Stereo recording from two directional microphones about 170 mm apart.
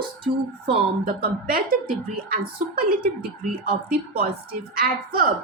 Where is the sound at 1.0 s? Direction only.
60° right (ahead or behind).